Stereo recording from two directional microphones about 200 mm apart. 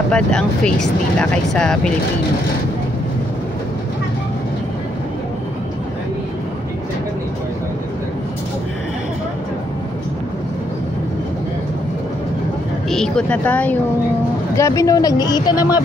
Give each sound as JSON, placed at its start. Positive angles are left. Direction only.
{"t": 0.1, "sound": "speech", "side_deg": 5}
{"t": 12.9, "sound": "speech", "side_deg": 5}